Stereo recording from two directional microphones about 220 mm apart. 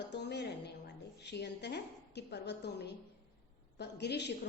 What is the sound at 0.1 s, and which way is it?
Music, 50° left (ahead or behind).